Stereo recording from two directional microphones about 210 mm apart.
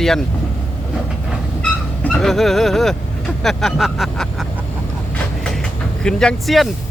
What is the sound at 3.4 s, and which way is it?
Vehicle, centre (ahead or behind).